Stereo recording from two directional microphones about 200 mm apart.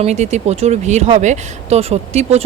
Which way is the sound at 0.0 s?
35° right (ahead or behind).